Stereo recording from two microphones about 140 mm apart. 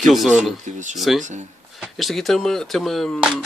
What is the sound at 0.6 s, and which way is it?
Speech, 60° right (ahead or behind).